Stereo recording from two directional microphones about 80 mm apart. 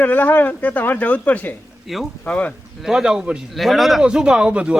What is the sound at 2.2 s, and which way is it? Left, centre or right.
Speech, centre.